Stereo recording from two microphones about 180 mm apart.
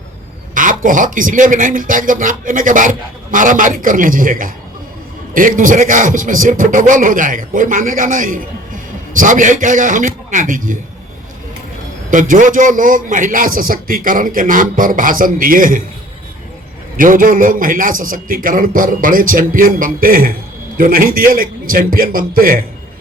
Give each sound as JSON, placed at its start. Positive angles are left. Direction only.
{"t": 0.5, "sound": "a man's voice", "side_deg": -45}
{"t": 12.1, "sound": "a man's voice", "side_deg": -45}
{"t": 17.0, "sound": "a man's voice", "side_deg": -50}